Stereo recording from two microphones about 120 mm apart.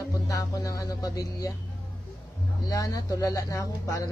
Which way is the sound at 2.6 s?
30° left (ahead or behind).